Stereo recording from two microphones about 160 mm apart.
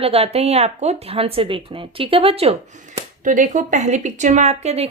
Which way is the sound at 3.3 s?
55° right (ahead or behind).